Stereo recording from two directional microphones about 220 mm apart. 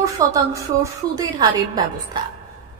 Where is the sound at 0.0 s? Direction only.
15° right (ahead or behind).